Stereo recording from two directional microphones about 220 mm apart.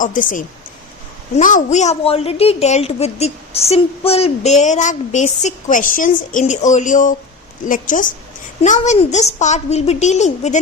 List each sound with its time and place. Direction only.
0.0 s a woman's voice: 35° left (ahead or behind)